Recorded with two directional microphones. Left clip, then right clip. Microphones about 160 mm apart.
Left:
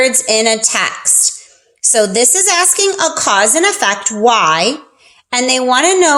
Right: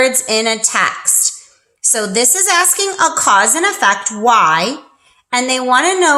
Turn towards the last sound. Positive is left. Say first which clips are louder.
# left 1 dB
turn(degrees=30)  # may be behind; listen again after turning